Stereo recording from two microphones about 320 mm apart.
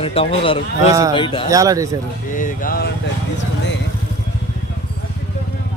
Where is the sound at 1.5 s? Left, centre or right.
Centre.